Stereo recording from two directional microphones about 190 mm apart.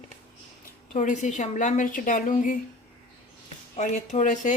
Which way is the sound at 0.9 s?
40° left (ahead or behind).